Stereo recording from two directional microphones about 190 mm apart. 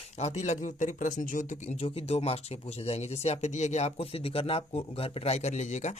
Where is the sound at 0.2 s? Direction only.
35° left (ahead or behind).